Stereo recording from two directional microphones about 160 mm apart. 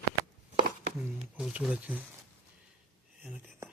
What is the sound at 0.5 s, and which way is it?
Chopping, 55° right (ahead or behind).